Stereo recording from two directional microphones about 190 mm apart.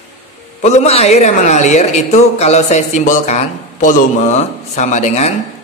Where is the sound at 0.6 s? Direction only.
35° left (ahead or behind).